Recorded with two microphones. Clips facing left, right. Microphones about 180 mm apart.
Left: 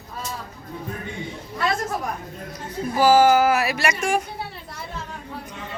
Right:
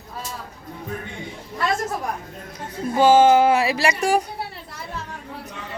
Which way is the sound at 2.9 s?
25° right (ahead or behind).